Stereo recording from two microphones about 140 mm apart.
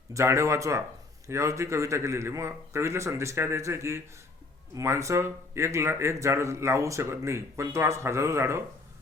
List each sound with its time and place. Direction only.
0.1 s speech: 20° right (ahead or behind)